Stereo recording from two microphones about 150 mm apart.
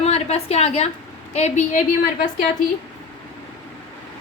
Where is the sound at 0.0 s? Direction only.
45° left (ahead or behind).